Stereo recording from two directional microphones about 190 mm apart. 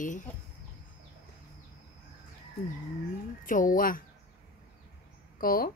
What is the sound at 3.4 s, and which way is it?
Speech, 45° left (ahead or behind).